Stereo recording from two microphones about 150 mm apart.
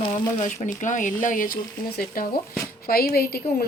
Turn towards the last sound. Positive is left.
turn(degrees=90)